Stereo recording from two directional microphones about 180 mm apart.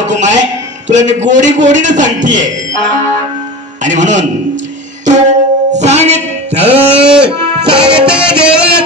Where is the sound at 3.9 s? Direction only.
45° right (ahead or behind).